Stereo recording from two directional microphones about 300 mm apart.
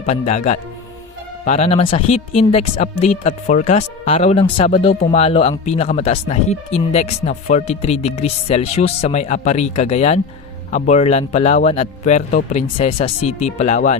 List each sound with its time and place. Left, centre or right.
0.0 s speech: left